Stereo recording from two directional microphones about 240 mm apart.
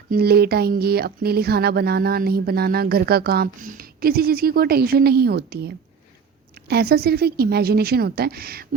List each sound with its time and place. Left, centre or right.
0.1 s speech: right